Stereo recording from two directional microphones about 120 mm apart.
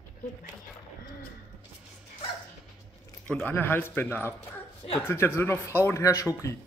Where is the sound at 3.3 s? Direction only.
15° left (ahead or behind).